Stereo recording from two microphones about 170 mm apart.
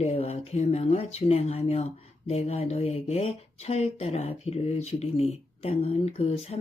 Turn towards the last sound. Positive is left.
turn(degrees=35)  # may be behind; listen again after turning